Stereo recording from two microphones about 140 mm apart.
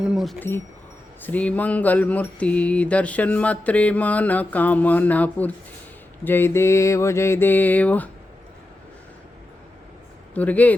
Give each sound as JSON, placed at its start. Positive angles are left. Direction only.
{"t": 0.0, "sound": "speech", "side_deg": -5}
{"t": 0.3, "sound": "mantra", "side_deg": 15}
{"t": 10.3, "sound": "mantra", "side_deg": 10}